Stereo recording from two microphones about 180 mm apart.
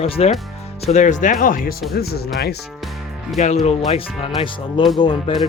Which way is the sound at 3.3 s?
40° left (ahead or behind).